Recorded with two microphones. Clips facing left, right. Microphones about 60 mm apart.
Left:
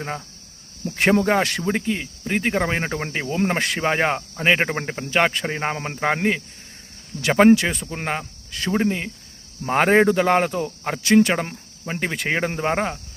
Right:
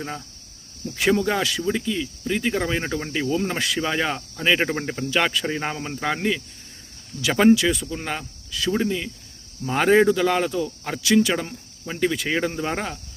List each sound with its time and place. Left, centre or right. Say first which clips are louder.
0.9 s speech: left 3 dB; left
5.7 s speech: left 2 dB; left
7.2 s speech: left 2 dB; left